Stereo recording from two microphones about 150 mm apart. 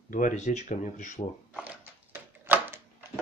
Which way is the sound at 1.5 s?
10° right (ahead or behind).